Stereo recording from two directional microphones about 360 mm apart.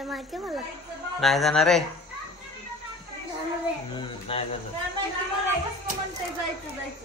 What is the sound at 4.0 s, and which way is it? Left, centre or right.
Speech, centre.